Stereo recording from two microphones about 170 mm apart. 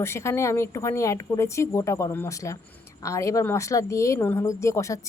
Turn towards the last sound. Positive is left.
turn(degrees=15)  # may be behind; listen again after turning